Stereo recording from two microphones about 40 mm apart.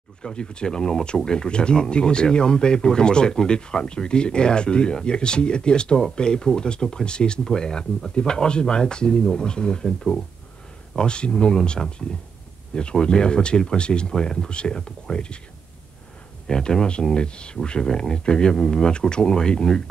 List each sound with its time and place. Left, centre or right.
0.2 s speech: left
9.8 s speech: centre
11.0 s speech: left
13.0 s speech: left
14.1 s speech: centre
16.4 s speech: centre